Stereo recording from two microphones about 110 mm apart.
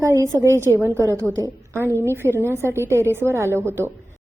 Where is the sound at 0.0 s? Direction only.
25° right (ahead or behind).